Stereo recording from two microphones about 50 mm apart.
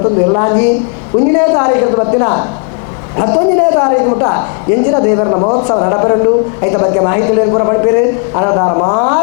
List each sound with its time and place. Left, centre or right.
0.0 s a woman's voice: left